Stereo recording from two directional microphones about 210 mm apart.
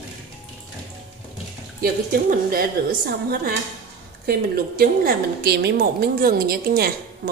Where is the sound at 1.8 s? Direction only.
45° right (ahead or behind).